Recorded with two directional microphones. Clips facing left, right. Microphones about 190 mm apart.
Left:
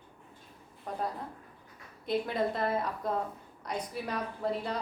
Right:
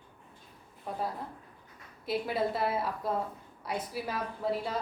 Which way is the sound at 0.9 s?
5° right (ahead or behind).